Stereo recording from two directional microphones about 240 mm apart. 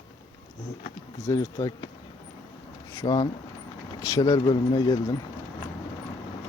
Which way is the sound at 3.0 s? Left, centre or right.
Centre.